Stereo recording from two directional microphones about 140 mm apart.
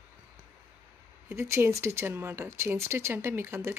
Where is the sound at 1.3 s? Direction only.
20° right (ahead or behind).